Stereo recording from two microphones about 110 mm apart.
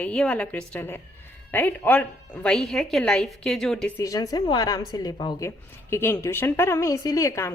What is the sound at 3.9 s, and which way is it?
A woman's voice, 30° left (ahead or behind).